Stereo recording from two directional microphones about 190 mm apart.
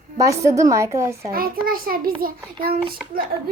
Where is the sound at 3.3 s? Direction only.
50° right (ahead or behind).